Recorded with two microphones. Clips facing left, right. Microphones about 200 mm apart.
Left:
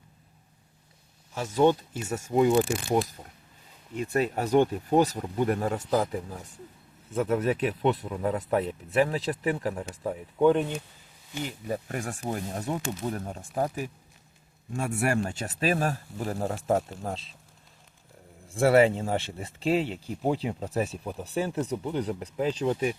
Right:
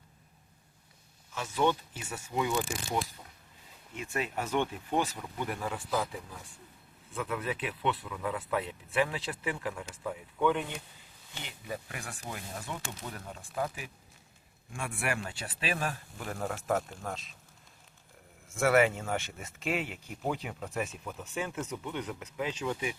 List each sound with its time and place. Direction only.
1.3 s speech: 40° left (ahead or behind)
3.9 s speech: 40° left (ahead or behind)
13.1 s speech: 40° left (ahead or behind)
18.4 s speech: 30° left (ahead or behind)